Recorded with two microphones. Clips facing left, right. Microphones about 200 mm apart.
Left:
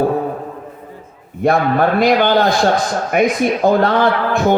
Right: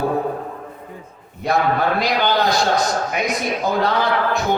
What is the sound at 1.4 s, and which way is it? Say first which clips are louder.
A man's voice: left 5 dB; 55° left (ahead or behind).